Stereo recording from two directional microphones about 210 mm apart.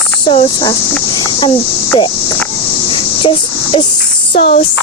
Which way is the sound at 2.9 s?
25° left (ahead or behind).